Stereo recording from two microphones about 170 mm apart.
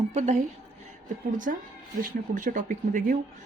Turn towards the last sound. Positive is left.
turn(degrees=-50)  # may be behind; listen again after turning